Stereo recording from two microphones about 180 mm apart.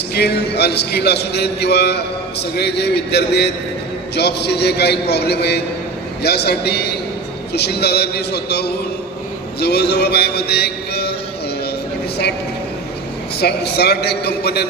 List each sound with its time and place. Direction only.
0.1 s a man's voice: 65° left (ahead or behind)
9.6 s music: 65° left (ahead or behind)
13.4 s a man's voice: 65° left (ahead or behind)